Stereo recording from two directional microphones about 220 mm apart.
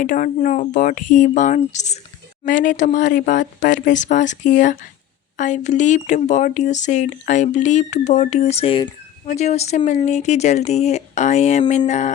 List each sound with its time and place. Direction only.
0.0 s speech: 35° left (ahead or behind)